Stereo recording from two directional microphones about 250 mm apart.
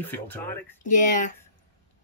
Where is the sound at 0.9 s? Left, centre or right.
Left.